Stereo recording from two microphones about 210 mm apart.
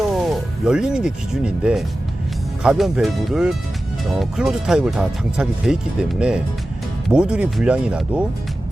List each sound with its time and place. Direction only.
0.1 s speech: centre (ahead or behind)